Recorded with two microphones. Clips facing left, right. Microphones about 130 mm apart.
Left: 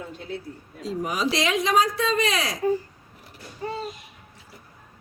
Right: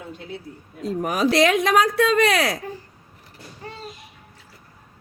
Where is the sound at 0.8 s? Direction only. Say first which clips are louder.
Right 5 dB; 55° right (ahead or behind).